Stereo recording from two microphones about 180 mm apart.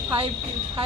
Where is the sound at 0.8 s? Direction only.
30° right (ahead or behind).